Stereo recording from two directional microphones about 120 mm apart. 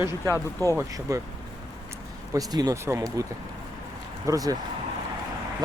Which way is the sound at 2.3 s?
30° right (ahead or behind).